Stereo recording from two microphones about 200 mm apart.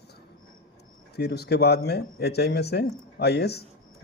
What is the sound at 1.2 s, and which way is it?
A man's voice, 55° left (ahead or behind).